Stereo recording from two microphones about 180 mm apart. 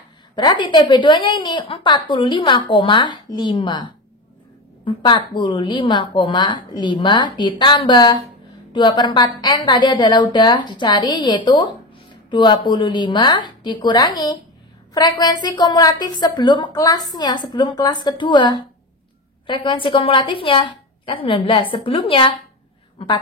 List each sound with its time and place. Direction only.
0.4 s a woman's voice: 25° left (ahead or behind)